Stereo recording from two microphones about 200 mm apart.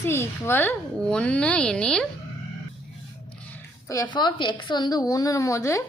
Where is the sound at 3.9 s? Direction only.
20° left (ahead or behind).